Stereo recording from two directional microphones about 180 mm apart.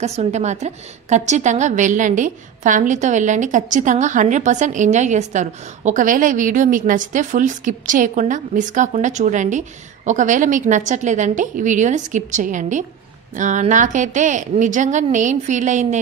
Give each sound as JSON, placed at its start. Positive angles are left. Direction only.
{"t": 0.0, "sound": "a woman's voice", "side_deg": -35}